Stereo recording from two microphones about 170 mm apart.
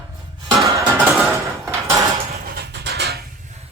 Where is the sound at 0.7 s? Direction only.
20° right (ahead or behind).